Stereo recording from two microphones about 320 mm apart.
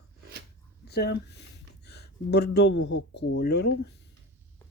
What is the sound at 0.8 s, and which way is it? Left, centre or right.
Speech, left.